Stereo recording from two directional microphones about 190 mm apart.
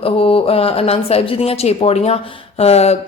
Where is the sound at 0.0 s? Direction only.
30° left (ahead or behind).